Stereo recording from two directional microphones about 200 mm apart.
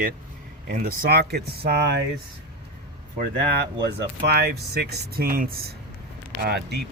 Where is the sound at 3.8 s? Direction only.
55° right (ahead or behind).